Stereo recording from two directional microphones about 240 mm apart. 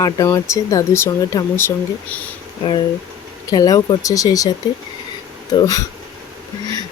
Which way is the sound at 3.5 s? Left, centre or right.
Centre.